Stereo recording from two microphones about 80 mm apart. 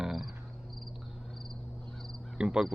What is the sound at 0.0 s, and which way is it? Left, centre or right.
Cricket, centre.